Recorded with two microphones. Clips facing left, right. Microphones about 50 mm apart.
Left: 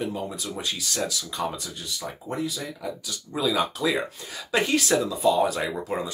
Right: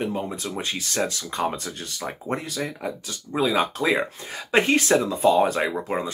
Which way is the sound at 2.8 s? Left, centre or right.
Right.